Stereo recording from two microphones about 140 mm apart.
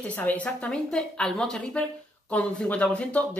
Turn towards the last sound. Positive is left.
turn(degrees=10)  # may be behind; listen again after turning